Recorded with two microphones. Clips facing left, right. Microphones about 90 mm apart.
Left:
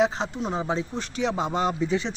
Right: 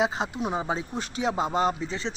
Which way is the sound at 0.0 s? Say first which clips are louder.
Left 2 dB; 5° right (ahead or behind).